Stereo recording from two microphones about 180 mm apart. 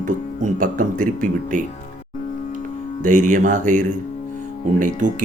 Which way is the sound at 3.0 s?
45° right (ahead or behind).